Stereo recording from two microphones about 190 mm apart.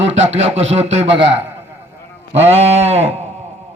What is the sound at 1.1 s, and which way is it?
Speech, 70° right (ahead or behind).